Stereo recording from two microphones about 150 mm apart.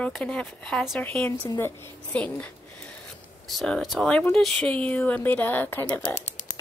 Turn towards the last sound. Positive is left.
turn(degrees=15)  # may be behind; listen again after turning